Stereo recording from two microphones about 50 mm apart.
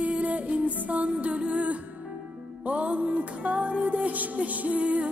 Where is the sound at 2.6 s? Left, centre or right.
Right.